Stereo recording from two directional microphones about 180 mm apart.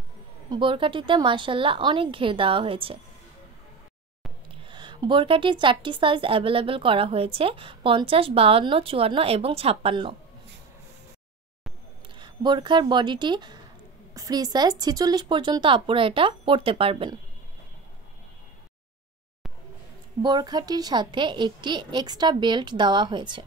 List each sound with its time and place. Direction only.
0.5 s speech: 30° right (ahead or behind)
4.6 s a woman's voice: 25° right (ahead or behind)
12.2 s speech: 25° right (ahead or behind)
20.2 s speech: 25° right (ahead or behind)